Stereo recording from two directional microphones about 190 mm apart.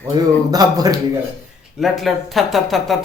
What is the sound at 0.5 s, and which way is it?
Speech, 20° right (ahead or behind).